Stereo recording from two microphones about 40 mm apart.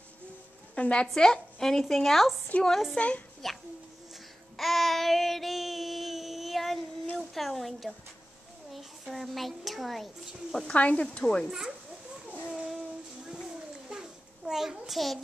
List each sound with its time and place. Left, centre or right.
0.7 s speech: left
1.1 s speech: centre
2.5 s speech: left
3.0 s speech: left
3.4 s a child's voice: centre
4.6 s child singing: centre
7.2 s a sound: centre
9.1 s a child's voice: centre
10.7 s speech: left
11.4 s a child's voice: centre
12.3 s a sound: left
12.5 s child singing: centre
13.8 s a sound: centre